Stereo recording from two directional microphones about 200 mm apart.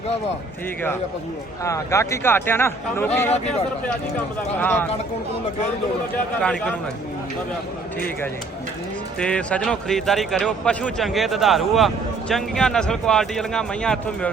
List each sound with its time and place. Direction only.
1.6 s speech: 15° left (ahead or behind)
3.3 s speech: 35° left (ahead or behind)
4.6 s speech: 10° left (ahead or behind)
6.4 s a man's voice: 5° left (ahead or behind)
9.1 s a man's voice: 5° left (ahead or behind)